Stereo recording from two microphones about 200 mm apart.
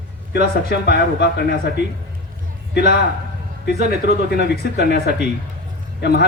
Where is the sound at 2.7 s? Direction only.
55° left (ahead or behind).